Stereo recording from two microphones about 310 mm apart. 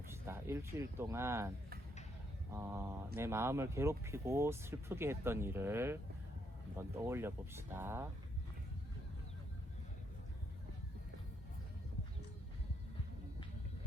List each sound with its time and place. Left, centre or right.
0.1 s speech: centre